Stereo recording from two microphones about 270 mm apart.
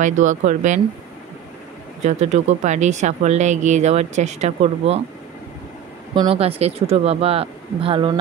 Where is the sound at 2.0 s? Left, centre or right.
Right.